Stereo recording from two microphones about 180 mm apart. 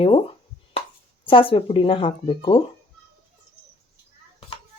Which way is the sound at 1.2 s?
30° left (ahead or behind).